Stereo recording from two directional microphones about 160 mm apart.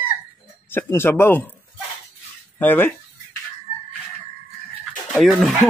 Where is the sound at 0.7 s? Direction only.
15° left (ahead or behind).